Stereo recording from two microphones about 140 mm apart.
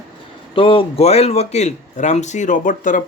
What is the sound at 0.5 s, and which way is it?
Speech, 40° left (ahead or behind).